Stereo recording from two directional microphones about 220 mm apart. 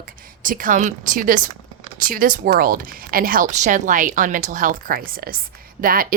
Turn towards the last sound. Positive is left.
turn(degrees=-40)  # may be behind; listen again after turning